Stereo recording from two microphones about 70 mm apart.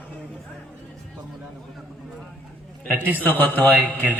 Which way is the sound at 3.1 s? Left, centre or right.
Left.